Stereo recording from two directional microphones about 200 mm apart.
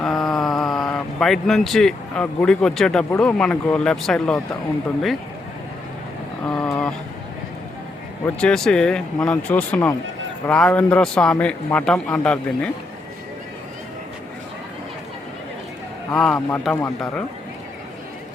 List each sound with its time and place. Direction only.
0.0 s speech: centre (ahead or behind)
6.4 s a man's voice: 5° left (ahead or behind)
8.2 s a man's voice: 5° left (ahead or behind)
16.1 s a man's voice: 5° left (ahead or behind)